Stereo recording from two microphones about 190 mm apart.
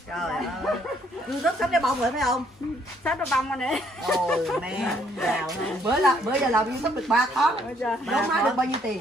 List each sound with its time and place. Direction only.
0.1 s speech: centre (ahead or behind)
1.4 s speech: centre (ahead or behind)
5.9 s speech: 10° right (ahead or behind)